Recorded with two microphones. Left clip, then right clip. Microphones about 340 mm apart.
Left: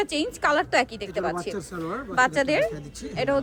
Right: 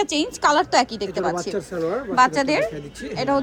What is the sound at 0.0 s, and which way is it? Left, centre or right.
Speech, centre.